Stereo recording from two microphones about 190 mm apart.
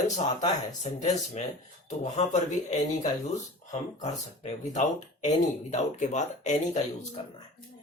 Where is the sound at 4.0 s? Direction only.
40° left (ahead or behind).